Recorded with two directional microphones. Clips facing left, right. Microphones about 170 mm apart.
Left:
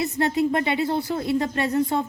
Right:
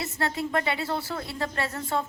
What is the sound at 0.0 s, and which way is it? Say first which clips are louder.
Speech: left 8 dB; 20° left (ahead or behind).